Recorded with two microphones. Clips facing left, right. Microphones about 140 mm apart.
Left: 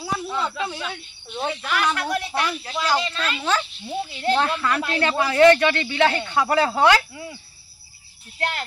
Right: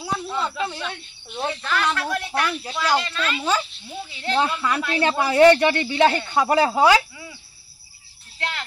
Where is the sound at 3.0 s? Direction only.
35° left (ahead or behind).